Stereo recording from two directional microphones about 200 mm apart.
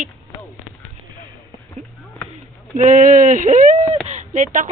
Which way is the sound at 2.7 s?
35° right (ahead or behind).